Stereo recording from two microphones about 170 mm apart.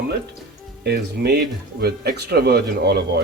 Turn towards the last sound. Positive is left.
turn(degrees=-70)  # may be behind; listen again after turning